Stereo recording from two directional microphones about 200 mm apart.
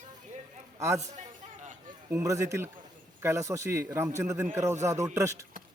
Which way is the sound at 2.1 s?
15° right (ahead or behind).